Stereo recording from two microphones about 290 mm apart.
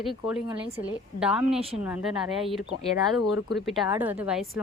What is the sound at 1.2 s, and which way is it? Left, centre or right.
A woman's voice, centre.